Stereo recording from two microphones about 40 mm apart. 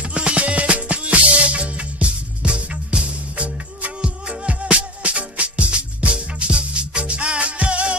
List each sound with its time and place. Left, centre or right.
0.1 s music: right